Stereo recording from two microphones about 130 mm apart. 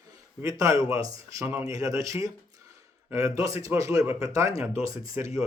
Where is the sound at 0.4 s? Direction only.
25° right (ahead or behind).